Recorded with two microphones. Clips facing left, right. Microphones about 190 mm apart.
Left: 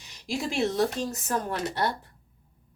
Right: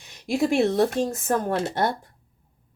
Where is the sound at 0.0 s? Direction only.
55° right (ahead or behind).